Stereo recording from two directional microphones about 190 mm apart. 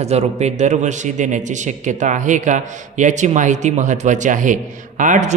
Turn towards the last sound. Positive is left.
turn(degrees=-40)  # may be behind; listen again after turning